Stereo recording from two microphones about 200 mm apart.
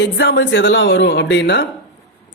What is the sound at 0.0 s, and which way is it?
Speech, 65° left (ahead or behind).